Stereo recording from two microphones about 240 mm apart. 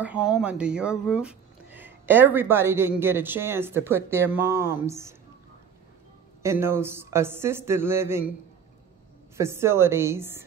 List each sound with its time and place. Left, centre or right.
0.0 s speech: centre
6.4 s speech: centre
9.4 s speech: centre